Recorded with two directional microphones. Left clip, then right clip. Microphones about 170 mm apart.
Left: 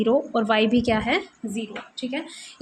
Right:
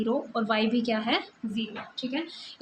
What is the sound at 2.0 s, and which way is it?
Speech, 60° left (ahead or behind).